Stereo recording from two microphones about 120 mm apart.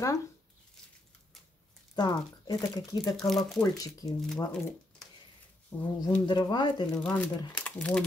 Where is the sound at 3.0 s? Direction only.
Centre (ahead or behind).